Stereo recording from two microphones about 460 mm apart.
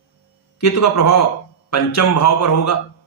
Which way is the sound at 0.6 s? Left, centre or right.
Left.